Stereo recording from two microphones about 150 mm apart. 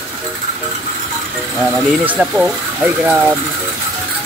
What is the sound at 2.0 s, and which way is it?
Speech, 5° right (ahead or behind).